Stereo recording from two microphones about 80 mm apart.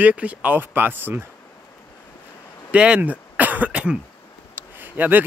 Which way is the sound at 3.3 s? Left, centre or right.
Right.